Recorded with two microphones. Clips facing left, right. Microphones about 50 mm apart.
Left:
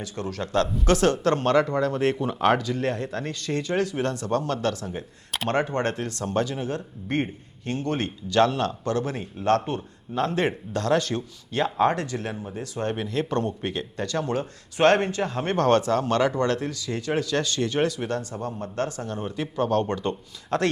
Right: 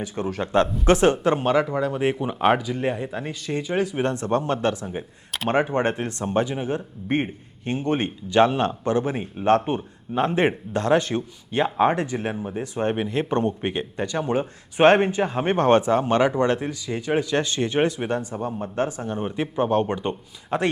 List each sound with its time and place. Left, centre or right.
0.0 s speech: right